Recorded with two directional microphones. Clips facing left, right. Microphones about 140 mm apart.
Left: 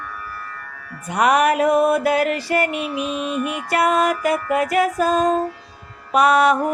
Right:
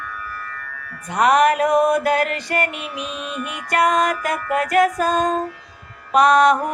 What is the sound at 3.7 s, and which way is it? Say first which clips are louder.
Music: even; 5° left (ahead or behind).